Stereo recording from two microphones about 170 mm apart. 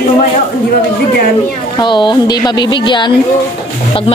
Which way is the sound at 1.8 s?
25° left (ahead or behind).